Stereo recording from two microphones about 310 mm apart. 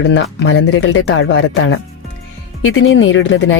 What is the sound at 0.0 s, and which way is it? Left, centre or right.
Speech, left.